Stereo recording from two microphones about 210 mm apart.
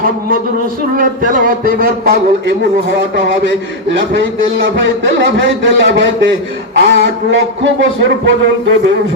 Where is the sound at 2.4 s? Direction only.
55° right (ahead or behind).